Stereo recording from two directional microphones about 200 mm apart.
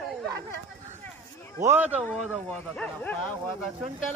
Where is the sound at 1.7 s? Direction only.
10° right (ahead or behind).